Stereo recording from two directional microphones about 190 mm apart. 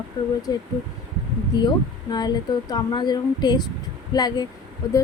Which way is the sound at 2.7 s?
20° left (ahead or behind).